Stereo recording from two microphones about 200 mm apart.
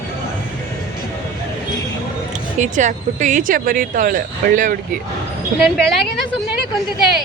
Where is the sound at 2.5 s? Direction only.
40° right (ahead or behind).